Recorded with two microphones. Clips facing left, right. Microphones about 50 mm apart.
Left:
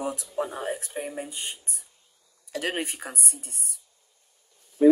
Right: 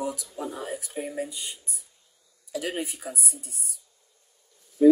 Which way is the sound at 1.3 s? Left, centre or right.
Left.